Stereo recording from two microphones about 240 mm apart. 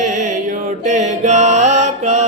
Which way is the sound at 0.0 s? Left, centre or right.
Right.